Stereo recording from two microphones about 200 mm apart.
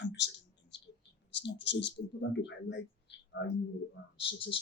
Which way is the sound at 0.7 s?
60° left (ahead or behind).